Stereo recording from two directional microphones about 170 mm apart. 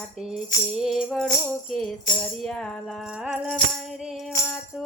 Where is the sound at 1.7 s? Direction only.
Centre (ahead or behind).